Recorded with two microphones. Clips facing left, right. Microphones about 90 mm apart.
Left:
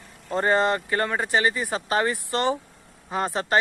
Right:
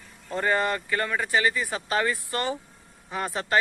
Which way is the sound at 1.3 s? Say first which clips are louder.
Left 2 dB; 25° left (ahead or behind).